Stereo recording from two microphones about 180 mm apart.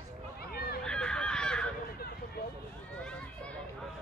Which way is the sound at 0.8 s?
5° left (ahead or behind).